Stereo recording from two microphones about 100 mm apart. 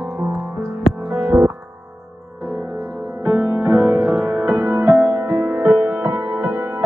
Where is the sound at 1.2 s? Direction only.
20° right (ahead or behind).